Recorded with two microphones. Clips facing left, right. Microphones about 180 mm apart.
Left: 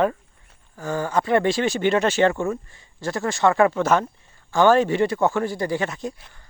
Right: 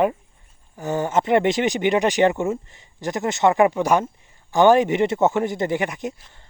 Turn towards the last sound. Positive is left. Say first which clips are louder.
# right 2 dB
turn(degrees=-20)  # may be behind; listen again after turning